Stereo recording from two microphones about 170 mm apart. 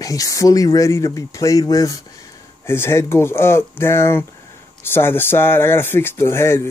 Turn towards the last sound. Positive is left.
turn(degrees=15)  # may be behind; listen again after turning